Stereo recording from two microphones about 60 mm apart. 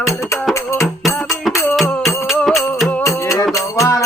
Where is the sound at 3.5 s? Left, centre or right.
Left.